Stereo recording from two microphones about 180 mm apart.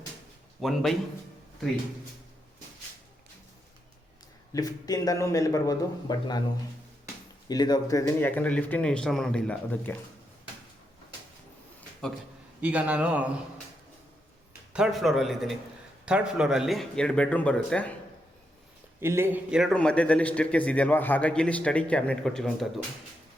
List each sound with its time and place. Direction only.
0.6 s a man's voice: centre (ahead or behind)
4.5 s a man's voice: 20° left (ahead or behind)
7.4 s a man's voice: 20° left (ahead or behind)
12.6 s a man's voice: 5° right (ahead or behind)
14.7 s a man's voice: centre (ahead or behind)
18.9 s a man's voice: 15° right (ahead or behind)
19.7 s a man's voice: 5° left (ahead or behind)